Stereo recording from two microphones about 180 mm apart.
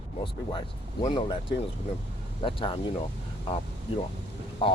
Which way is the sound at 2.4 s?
30° left (ahead or behind).